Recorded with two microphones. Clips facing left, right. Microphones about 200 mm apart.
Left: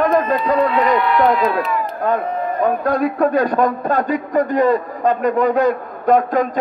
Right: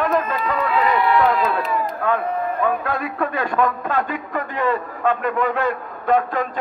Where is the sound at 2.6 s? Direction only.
40° left (ahead or behind).